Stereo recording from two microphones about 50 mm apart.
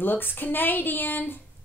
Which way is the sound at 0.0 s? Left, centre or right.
Left.